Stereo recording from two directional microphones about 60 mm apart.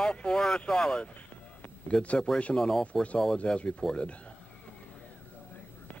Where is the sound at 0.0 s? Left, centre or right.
Centre.